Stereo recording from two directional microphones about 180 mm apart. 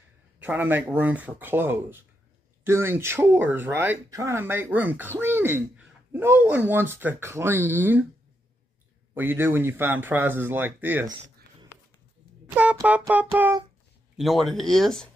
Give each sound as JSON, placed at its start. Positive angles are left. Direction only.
{"t": 0.4, "sound": "speech", "side_deg": -10}
{"t": 9.1, "sound": "speech", "side_deg": -10}
{"t": 12.4, "sound": "a sound", "side_deg": -5}
{"t": 12.8, "sound": "speech", "side_deg": -10}